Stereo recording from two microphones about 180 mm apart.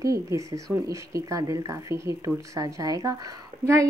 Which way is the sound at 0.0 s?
20° right (ahead or behind).